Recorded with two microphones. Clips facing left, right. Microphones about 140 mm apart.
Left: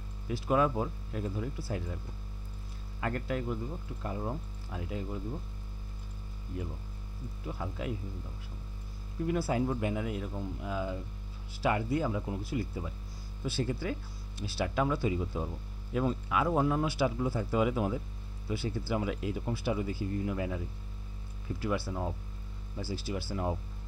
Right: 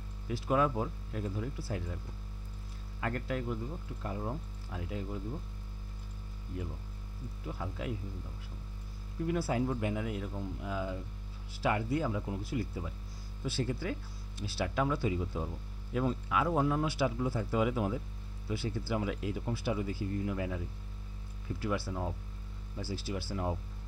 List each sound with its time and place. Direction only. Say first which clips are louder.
0.3 s speech: left 2 dB; 20° left (ahead or behind)
3.0 s speech: left 2 dB; 20° left (ahead or behind)
7.4 s speech: left 2 dB; 25° left (ahead or behind)
9.3 s speech: left 2 dB; 20° left (ahead or behind)
16.8 s speech: left 2 dB; 10° left (ahead or behind)
17.2 s speech: left 2 dB; 25° left (ahead or behind)
23.3 s speech: left 2 dB; 25° left (ahead or behind)